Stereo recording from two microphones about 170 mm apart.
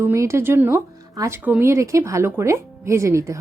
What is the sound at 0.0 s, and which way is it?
Speech, 15° right (ahead or behind).